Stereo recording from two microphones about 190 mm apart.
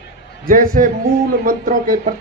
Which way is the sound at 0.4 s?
50° right (ahead or behind).